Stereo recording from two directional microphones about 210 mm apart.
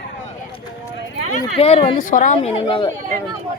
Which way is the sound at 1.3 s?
30° left (ahead or behind).